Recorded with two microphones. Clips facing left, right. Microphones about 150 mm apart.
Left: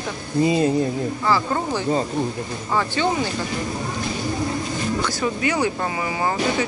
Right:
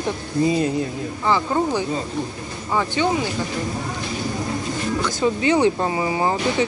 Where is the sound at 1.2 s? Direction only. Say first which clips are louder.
Right 4 dB; 15° right (ahead or behind).